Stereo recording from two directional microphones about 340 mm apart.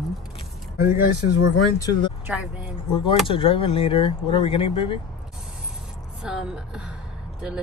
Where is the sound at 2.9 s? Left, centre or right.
Centre.